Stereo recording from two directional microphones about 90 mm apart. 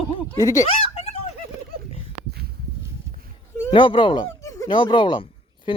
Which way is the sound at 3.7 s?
65° left (ahead or behind).